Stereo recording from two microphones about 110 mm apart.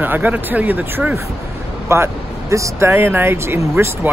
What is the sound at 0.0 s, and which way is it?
A man's voice, 15° right (ahead or behind).